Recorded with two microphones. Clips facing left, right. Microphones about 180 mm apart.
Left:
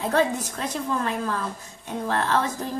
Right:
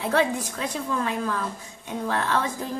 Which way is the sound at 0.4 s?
10° right (ahead or behind).